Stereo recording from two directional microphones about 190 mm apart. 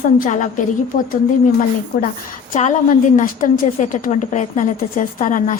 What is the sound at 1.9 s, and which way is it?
A woman's voice, 55° left (ahead or behind).